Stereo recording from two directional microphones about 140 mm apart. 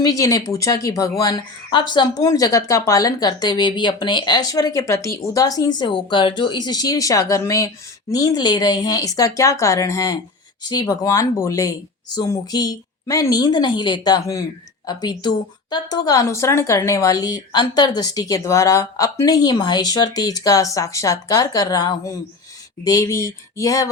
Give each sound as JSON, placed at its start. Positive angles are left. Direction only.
{"t": 0.0, "sound": "speech", "side_deg": 25}